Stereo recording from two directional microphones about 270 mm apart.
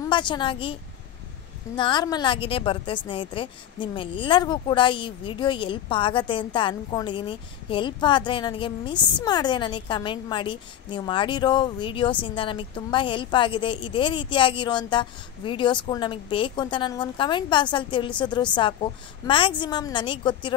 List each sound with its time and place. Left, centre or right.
0.0 s a woman's voice: centre
1.8 s a woman's voice: centre